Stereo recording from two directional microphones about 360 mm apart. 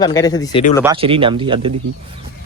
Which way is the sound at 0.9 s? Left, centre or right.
Centre.